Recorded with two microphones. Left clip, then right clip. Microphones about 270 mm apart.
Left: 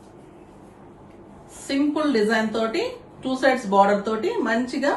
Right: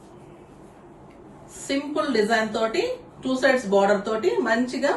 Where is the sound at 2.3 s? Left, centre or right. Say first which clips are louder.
Even; centre.